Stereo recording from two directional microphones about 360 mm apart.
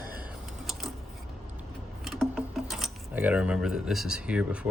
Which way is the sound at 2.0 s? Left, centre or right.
Centre.